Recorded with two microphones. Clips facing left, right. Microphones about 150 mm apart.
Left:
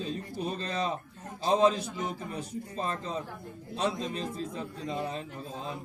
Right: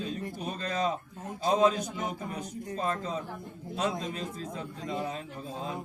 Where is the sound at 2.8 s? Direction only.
30° left (ahead or behind).